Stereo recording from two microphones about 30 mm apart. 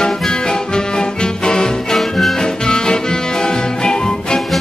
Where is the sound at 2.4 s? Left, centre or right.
Left.